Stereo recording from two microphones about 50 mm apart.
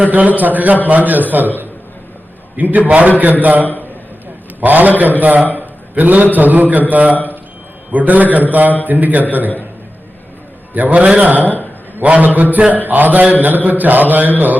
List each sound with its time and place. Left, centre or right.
0.0 s a man's voice: right
3.6 s a man's voice: left
4.6 s a man's voice: right
10.8 s a man's voice: right